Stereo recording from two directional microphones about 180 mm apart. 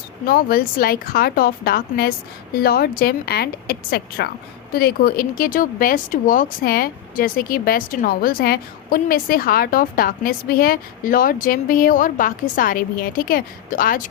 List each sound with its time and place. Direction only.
0.3 s speech: 55° left (ahead or behind)